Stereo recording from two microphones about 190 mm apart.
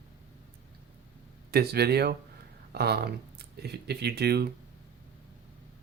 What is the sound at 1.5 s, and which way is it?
Speech, 55° right (ahead or behind).